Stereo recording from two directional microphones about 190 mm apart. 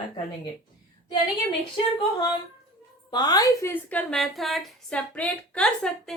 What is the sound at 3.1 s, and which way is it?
A woman's voice, 20° left (ahead or behind).